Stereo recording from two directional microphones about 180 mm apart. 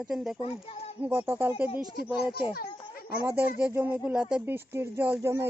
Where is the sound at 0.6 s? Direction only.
35° left (ahead or behind).